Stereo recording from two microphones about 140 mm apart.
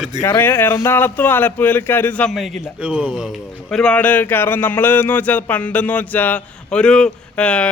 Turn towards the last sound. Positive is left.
turn(degrees=10)  # may be behind; listen again after turning